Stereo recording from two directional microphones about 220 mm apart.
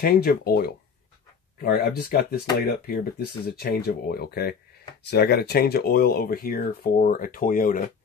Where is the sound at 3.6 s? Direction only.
45° left (ahead or behind).